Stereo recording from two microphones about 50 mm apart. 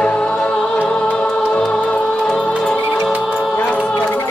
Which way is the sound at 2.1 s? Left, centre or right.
Centre.